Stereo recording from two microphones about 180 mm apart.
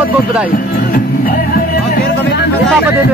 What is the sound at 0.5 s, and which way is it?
Music, 50° left (ahead or behind).